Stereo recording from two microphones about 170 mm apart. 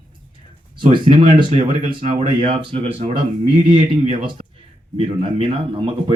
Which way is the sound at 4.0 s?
45° right (ahead or behind).